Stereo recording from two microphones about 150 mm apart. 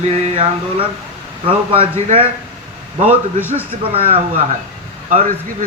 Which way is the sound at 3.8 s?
40° right (ahead or behind).